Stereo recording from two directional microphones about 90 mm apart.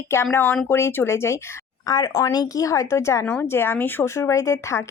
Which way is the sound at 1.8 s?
40° left (ahead or behind).